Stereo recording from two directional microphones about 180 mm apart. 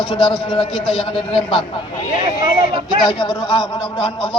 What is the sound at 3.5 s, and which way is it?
Speech, 25° left (ahead or behind).